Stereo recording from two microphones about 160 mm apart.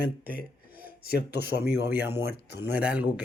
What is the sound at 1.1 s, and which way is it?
Speech, 85° left.